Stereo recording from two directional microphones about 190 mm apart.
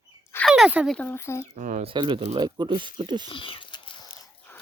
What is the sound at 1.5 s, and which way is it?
Speech, 45° right (ahead or behind).